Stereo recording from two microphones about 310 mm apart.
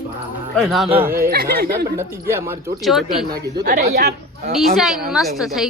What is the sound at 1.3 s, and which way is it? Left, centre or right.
Speech, right.